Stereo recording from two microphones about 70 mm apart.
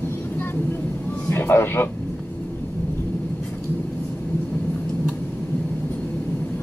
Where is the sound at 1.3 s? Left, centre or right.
Left.